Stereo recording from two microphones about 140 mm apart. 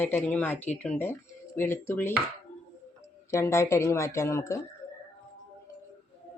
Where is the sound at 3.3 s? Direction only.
20° left (ahead or behind).